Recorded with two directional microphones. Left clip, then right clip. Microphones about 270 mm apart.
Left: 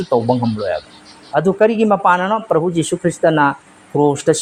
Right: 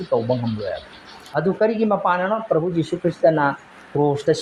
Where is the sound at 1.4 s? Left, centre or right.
Left.